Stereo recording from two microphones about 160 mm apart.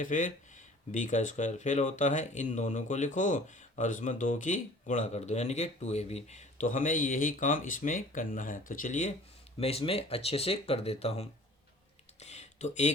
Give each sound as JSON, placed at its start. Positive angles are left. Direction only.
{"t": 0.0, "sound": "speech", "side_deg": 55}
{"t": 9.6, "sound": "speech", "side_deg": 40}
{"t": 12.2, "sound": "a sound", "side_deg": 45}